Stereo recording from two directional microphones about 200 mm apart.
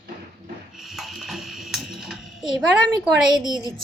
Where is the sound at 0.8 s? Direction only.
Centre (ahead or behind).